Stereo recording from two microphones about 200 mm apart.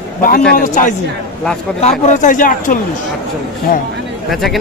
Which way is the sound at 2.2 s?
40° left (ahead or behind).